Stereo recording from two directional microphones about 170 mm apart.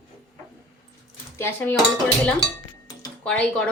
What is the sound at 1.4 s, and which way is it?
Dishes, 15° left (ahead or behind).